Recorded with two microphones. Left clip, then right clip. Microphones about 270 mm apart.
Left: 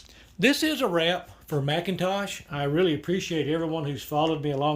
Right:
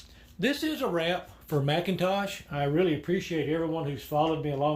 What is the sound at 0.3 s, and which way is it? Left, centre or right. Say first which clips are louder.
Speech: left 6 dB; left.